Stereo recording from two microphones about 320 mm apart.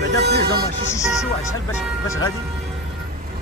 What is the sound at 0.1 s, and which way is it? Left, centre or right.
Music, right.